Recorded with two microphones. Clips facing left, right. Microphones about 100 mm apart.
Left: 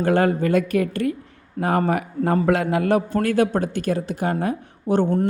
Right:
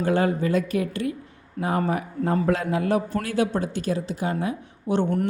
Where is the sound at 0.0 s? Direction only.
60° left (ahead or behind).